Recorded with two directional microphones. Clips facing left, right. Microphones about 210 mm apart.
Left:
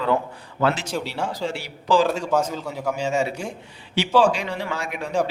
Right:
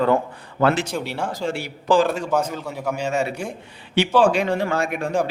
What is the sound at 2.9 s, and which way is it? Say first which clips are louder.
A man's voice: even; 60° right (ahead or behind).